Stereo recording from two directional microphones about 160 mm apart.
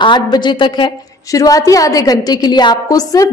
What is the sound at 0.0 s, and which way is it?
A woman's voice, 30° left (ahead or behind).